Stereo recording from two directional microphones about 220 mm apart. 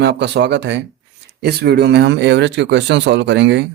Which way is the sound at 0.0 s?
50° right (ahead or behind).